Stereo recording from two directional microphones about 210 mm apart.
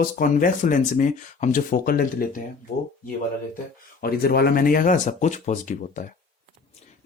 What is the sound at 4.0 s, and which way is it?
Speech, 45° left (ahead or behind).